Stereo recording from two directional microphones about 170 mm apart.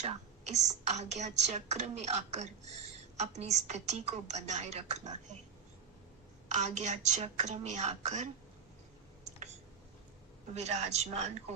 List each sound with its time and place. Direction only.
0.0 s a woman's voice: 40° right (ahead or behind)
6.5 s a woman's voice: 45° right (ahead or behind)
10.5 s a woman's voice: 40° right (ahead or behind)